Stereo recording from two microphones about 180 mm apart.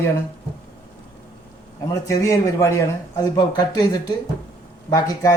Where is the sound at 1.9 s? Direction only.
15° left (ahead or behind).